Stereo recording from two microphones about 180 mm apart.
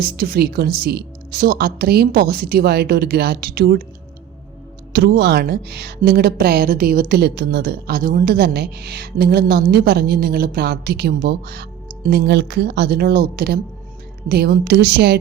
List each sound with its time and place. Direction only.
0.0 s a woman's voice: 55° right (ahead or behind)
4.9 s a woman's voice: 65° right (ahead or behind)